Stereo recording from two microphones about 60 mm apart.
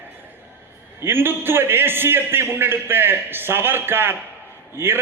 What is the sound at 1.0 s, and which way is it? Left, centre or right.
A man's voice, right.